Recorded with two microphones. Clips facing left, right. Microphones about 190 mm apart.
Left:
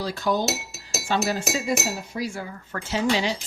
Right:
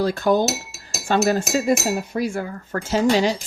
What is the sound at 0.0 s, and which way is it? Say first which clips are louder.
Speech: right 6 dB; 55° right (ahead or behind).